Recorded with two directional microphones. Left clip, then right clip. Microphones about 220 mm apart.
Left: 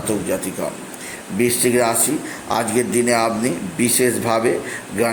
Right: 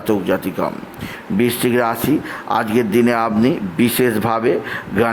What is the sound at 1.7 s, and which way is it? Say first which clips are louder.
A man's voice: right 1 dB; 15° right (ahead or behind).